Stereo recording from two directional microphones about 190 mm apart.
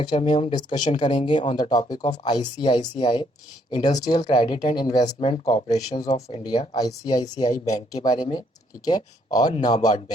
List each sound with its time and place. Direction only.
0.0 s speech: 30° left (ahead or behind)
5.7 s speech: 20° left (ahead or behind)